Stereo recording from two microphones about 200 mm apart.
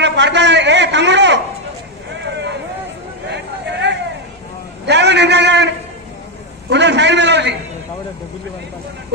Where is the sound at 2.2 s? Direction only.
60° right (ahead or behind).